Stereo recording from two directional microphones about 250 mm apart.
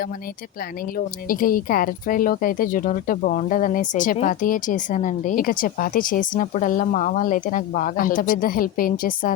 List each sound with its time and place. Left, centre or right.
0.9 s speech: left